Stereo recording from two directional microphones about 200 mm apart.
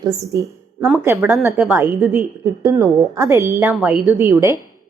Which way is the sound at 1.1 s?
Centre (ahead or behind).